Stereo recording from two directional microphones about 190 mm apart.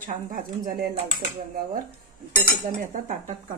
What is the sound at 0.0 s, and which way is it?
Speech, 45° right (ahead or behind).